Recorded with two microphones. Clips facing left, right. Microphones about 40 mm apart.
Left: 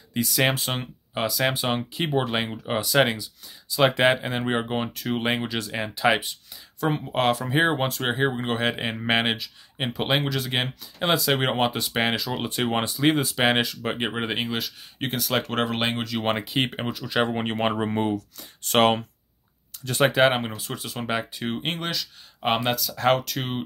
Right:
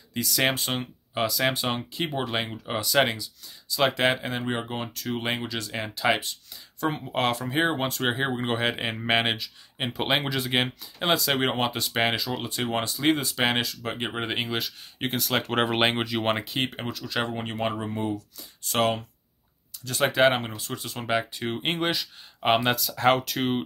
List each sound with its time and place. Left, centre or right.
0.1 s speech: centre
4.4 s speech: left; by 12.4 s centre
12.6 s speech: centre
13.6 s speech: left
13.9 s speech: centre
16.2 s speech: centre
16.5 s speech: centre
17.4 s speech: left
19.8 s speech: left
20.1 s speech: centre
21.7 s speech: centre
22.5 s speech: centre